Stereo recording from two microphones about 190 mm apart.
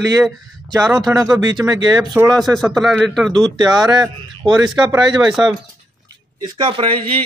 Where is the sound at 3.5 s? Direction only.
20° right (ahead or behind).